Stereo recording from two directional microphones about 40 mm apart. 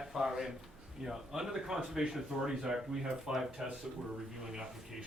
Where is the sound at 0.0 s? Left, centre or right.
Centre.